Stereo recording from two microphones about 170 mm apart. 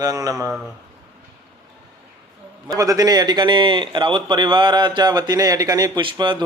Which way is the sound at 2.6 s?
20° right (ahead or behind).